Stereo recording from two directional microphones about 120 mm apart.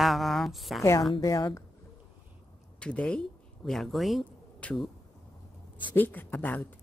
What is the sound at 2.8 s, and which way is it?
Speech, 10° left (ahead or behind).